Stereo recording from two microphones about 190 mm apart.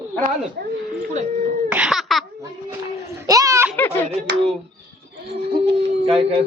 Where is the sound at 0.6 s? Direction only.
55° right (ahead or behind).